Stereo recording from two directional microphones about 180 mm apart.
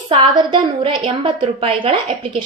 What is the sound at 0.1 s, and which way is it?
A woman's voice, 30° right (ahead or behind).